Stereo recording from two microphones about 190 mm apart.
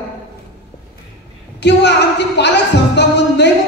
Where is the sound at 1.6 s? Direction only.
65° left (ahead or behind).